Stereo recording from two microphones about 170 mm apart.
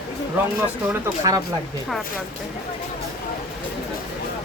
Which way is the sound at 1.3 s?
20° right (ahead or behind).